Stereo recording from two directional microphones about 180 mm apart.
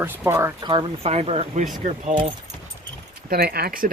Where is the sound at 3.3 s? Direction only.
60° right (ahead or behind).